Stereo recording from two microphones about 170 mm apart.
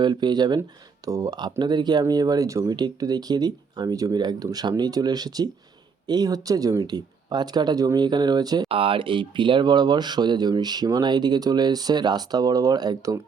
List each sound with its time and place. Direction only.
0.0 s speech: 25° right (ahead or behind)